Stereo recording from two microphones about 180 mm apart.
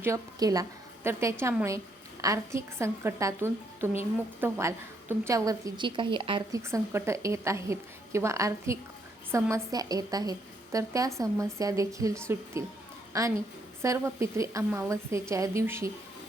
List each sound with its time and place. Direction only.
0.0 s a woman's voice: 20° right (ahead or behind)
6.6 s a woman's voice: 15° right (ahead or behind)